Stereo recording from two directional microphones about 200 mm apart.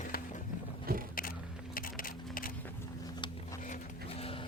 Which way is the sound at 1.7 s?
45° left (ahead or behind).